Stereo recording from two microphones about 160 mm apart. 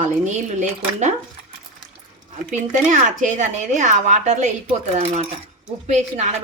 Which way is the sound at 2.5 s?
50° right (ahead or behind).